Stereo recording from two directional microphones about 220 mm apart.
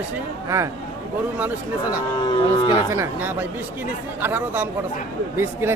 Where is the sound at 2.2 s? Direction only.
20° left (ahead or behind).